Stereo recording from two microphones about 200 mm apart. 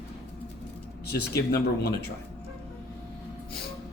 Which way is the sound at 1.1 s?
55° left (ahead or behind).